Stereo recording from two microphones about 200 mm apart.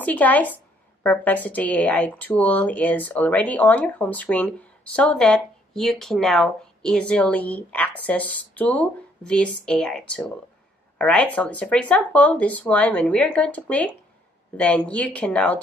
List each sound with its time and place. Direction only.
0.0 s a woman's voice: 10° left (ahead or behind)